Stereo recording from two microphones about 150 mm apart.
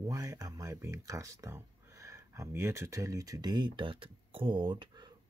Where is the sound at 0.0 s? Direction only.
20° right (ahead or behind).